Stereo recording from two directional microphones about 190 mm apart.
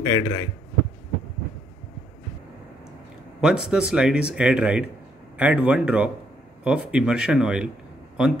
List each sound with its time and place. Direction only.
0.0 s a man's voice: 20° left (ahead or behind)
3.3 s speech: 5° right (ahead or behind)